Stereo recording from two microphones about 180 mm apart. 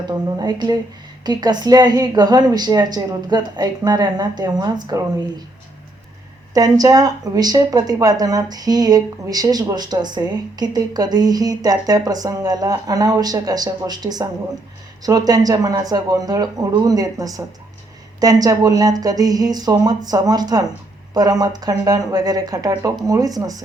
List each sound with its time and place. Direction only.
0.1 s speech: 20° right (ahead or behind)
6.5 s speech: 20° right (ahead or behind)